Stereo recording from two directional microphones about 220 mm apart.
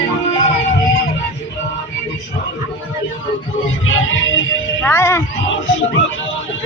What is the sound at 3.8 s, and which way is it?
Music, 60° left (ahead or behind).